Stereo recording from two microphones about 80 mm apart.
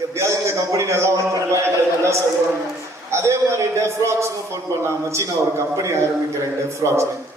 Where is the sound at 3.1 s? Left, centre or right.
Right.